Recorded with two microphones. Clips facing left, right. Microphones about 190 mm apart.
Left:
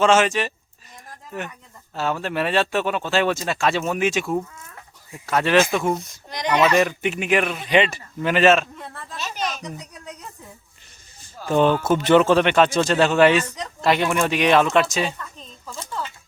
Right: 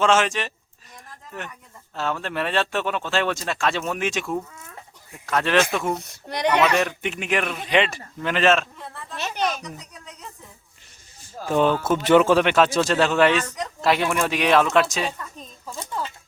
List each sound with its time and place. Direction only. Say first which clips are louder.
0.0 s speech: left 3 dB; centre (ahead or behind)
6.0 s a child's voice: right 5 dB; 65° right (ahead or behind)
6.7 s speech: left 4 dB; 5° left (ahead or behind)
9.1 s a sound: right 3 dB; 60° right (ahead or behind)
11.4 s speech: left 2 dB; 5° right (ahead or behind)
15.4 s a sound: right 1 dB; 10° right (ahead or behind)